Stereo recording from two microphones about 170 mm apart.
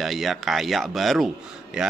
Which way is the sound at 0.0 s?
Centre (ahead or behind).